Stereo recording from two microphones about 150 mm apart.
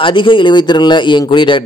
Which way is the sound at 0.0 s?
35° left (ahead or behind).